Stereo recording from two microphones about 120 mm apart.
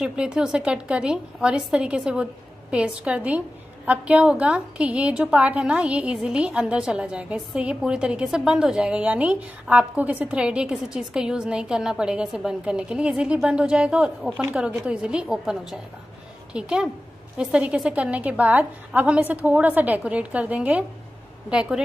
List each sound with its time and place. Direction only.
0.0 s a woman's voice: 10° right (ahead or behind)